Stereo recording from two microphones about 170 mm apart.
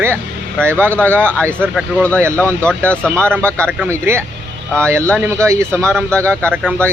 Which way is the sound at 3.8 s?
15° right (ahead or behind).